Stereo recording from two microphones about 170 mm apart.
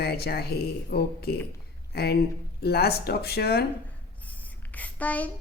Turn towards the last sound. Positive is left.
turn(degrees=10)  # may be behind; listen again after turning